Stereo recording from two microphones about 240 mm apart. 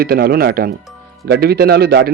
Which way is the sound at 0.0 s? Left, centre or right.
Right.